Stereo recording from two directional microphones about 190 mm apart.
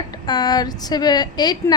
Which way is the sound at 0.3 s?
20° left (ahead or behind).